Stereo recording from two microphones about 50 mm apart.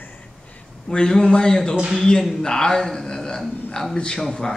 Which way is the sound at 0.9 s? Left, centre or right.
Centre.